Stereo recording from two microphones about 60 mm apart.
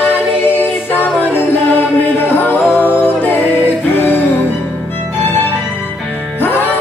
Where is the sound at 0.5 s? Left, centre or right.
Left.